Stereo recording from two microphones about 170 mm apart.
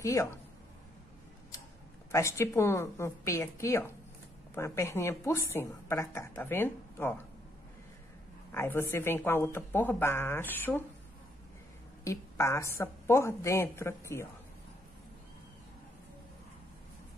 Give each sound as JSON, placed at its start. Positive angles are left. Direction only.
{"t": 0.0, "sound": "a woman's voice", "side_deg": 15}
{"t": 2.1, "sound": "a woman's voice", "side_deg": 15}
{"t": 8.5, "sound": "a woman's voice", "side_deg": 15}
{"t": 12.0, "sound": "a woman's voice", "side_deg": 15}